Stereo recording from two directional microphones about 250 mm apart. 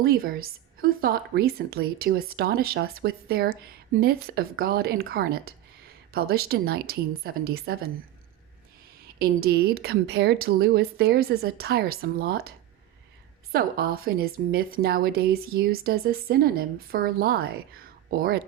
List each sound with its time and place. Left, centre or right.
0.0 s a woman's voice: right
9.1 s a woman's voice: right